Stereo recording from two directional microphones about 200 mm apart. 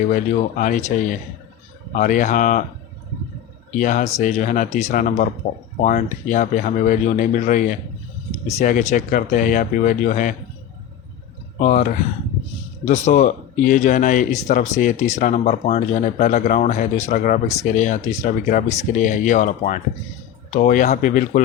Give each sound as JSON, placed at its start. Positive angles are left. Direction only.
{"t": 0.6, "sound": "speech", "side_deg": 40}
{"t": 3.7, "sound": "speech", "side_deg": 40}
{"t": 11.6, "sound": "speech", "side_deg": 40}